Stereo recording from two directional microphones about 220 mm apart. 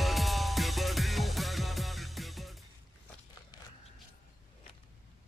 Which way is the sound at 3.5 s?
20° left (ahead or behind).